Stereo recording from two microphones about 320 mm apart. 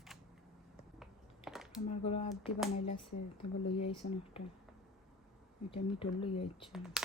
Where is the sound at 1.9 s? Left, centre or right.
Centre.